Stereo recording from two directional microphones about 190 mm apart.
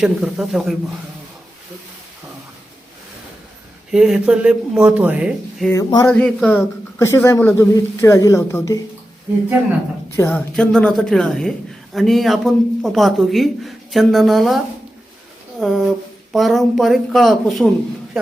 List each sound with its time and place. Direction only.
0.0 s a woman's voice: centre (ahead or behind)
3.9 s a woman's voice: centre (ahead or behind)
5.7 s speech: 20° left (ahead or behind)
6.1 s a man's voice: 5° left (ahead or behind)
10.2 s a woman's voice: 10° left (ahead or behind)
15.6 s a woman's voice: centre (ahead or behind)